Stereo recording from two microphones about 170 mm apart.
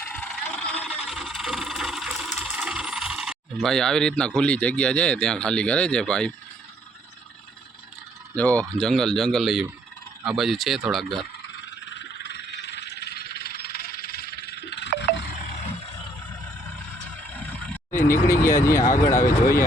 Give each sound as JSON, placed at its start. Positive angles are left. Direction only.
{"t": 0.0, "sound": "vehicle", "side_deg": 5}
{"t": 0.9, "sound": "a sound", "side_deg": 0}
{"t": 4.4, "sound": "speech", "side_deg": 5}
{"t": 8.4, "sound": "speech", "side_deg": 10}
{"t": 11.4, "sound": "frog", "side_deg": 90}
{"t": 17.3, "sound": "vehicle", "side_deg": 10}
{"t": 18.9, "sound": "speech", "side_deg": 15}